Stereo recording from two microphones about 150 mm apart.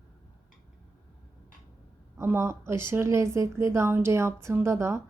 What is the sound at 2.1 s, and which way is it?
A woman's voice, 15° right (ahead or behind).